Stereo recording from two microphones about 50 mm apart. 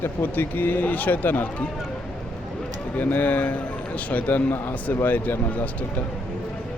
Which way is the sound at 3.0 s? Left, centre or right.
Left.